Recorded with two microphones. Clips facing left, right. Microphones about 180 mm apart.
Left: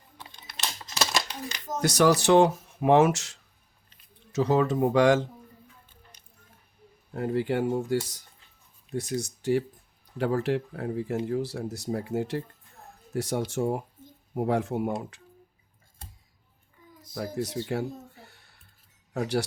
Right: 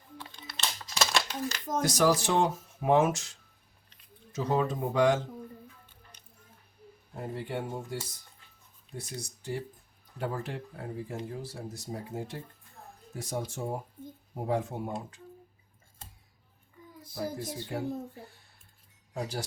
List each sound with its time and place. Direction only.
0.2 s crumpling: 10° left (ahead or behind)
1.8 s speech: 70° left (ahead or behind)
7.2 s speech: 80° left
17.2 s speech: 75° left (ahead or behind)
19.1 s speech: 70° left (ahead or behind)